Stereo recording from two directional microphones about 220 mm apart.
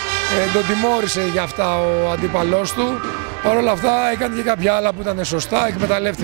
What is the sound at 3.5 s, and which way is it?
Speech, 20° right (ahead or behind).